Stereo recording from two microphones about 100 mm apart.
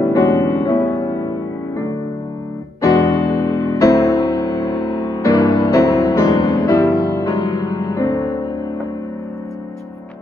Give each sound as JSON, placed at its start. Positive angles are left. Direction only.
{"t": 0.0, "sound": "music", "side_deg": 35}
{"t": 2.8, "sound": "electric piano", "side_deg": 30}